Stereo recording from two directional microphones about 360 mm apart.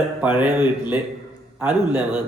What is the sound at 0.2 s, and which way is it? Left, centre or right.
A man's voice, centre.